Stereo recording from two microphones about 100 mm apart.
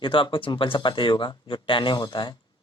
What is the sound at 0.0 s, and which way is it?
A man's voice, 55° left (ahead or behind).